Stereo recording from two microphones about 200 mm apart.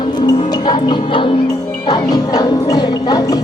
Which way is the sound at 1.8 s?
20° left (ahead or behind).